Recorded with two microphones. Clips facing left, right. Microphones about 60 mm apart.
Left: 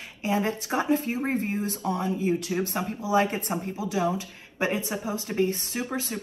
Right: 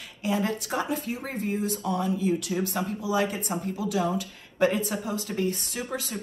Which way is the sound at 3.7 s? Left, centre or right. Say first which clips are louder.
Even; left.